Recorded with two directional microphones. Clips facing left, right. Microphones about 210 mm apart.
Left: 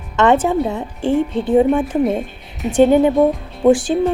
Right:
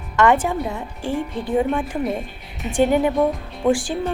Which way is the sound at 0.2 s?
20° left (ahead or behind).